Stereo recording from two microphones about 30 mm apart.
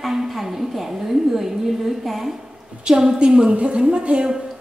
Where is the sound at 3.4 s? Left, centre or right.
Right.